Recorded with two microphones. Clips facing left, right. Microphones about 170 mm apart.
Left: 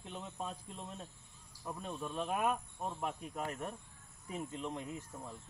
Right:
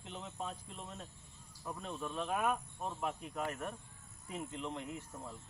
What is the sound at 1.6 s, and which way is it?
Speech, 10° left (ahead or behind).